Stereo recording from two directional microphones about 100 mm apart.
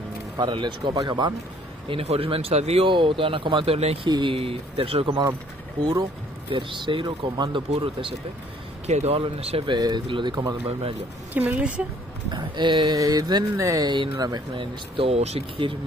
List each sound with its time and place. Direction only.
0.4 s speech: 50° right (ahead or behind)
1.9 s speech: 70° right (ahead or behind); by 2.9 s 90° right
2.9 s speech: 55° right (ahead or behind); by 4.1 s 80° right
4.1 s speech: 55° right (ahead or behind)
6.5 s speech: 55° right (ahead or behind)
7.1 s speech: 45° right (ahead or behind)
8.8 s a man's voice: 90° right
9.7 s speech: 45° right (ahead or behind)
11.3 s a woman's voice: 15° right (ahead or behind)
12.3 s speech: 50° right (ahead or behind); by 15.7 s 90° right